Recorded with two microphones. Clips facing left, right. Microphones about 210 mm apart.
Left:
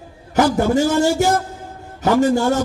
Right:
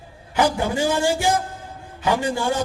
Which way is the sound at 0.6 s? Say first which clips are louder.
Left 6 dB; 45° left (ahead or behind).